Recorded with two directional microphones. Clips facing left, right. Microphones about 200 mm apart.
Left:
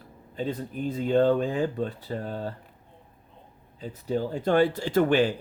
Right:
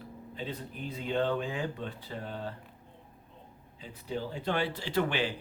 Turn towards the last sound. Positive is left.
turn(degrees=45)  # may be behind; listen again after turning